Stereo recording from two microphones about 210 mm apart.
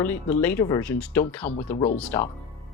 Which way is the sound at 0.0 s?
10° left (ahead or behind).